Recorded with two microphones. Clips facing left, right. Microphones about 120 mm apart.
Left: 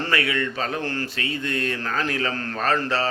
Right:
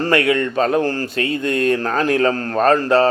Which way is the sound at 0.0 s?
45° right (ahead or behind).